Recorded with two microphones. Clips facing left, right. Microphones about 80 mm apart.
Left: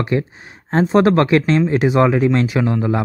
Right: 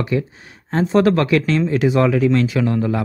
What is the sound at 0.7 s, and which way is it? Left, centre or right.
Speech, left.